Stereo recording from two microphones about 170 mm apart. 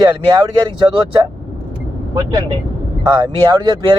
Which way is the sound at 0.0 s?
25° right (ahead or behind).